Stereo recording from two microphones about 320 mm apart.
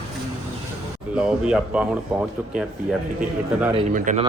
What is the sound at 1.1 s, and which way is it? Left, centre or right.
Speech, centre.